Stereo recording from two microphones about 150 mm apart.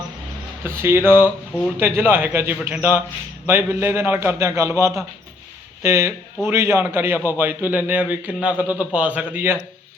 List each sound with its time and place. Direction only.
0.6 s a man's voice: 15° right (ahead or behind)